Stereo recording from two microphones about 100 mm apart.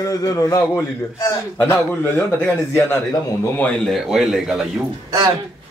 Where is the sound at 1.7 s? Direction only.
20° left (ahead or behind).